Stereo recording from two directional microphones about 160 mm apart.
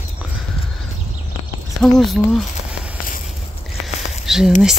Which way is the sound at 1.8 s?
Centre (ahead or behind).